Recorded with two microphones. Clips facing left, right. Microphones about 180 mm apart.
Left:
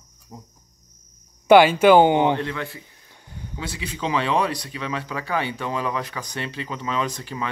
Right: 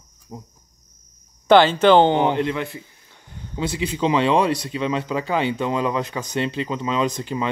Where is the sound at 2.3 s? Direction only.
20° right (ahead or behind).